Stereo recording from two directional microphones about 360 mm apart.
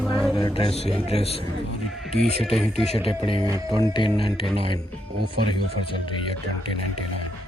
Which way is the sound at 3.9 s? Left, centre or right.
Centre.